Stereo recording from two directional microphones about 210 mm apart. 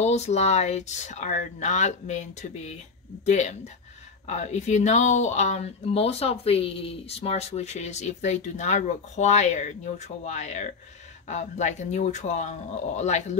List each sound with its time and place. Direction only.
0.0 s speech: 30° left (ahead or behind)